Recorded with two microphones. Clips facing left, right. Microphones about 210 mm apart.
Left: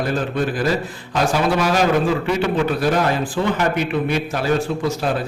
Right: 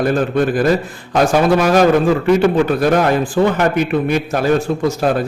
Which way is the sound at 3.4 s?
50° right (ahead or behind).